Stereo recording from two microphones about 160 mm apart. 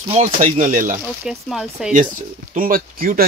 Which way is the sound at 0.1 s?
50° right (ahead or behind).